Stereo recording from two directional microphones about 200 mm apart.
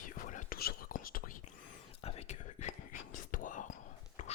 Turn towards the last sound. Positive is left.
turn(degrees=35)  # may be behind; listen again after turning